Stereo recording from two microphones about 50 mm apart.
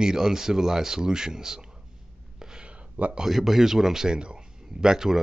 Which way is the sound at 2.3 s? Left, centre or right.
Centre.